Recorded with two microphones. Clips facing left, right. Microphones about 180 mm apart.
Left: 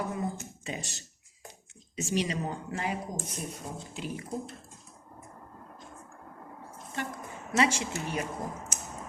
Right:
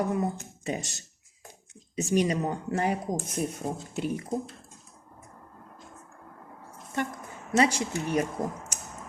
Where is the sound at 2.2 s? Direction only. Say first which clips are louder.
Right 5 dB; 45° right (ahead or behind).